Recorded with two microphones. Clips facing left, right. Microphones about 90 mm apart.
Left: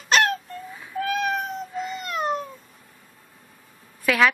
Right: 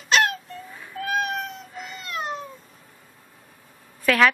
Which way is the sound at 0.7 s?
Centre (ahead or behind).